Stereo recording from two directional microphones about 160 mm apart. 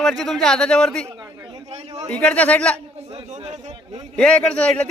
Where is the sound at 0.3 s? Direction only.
5° left (ahead or behind).